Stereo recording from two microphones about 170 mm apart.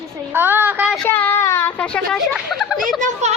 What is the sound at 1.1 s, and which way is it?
Speech, 10° left (ahead or behind).